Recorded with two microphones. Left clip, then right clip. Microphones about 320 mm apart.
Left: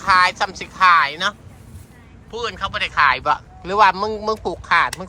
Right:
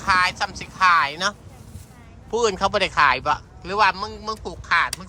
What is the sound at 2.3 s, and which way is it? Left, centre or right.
Speech, centre.